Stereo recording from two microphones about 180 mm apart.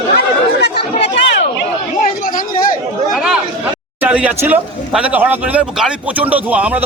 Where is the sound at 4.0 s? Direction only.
10° right (ahead or behind).